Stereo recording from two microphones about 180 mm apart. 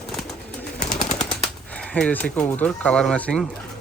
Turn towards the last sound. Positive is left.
turn(degrees=5)  # may be behind; listen again after turning